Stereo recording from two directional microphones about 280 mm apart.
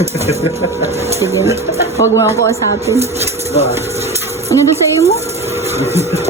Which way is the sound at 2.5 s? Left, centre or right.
Centre.